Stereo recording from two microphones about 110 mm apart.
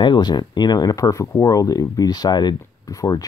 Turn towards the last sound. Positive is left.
turn(degrees=30)  # may be behind; listen again after turning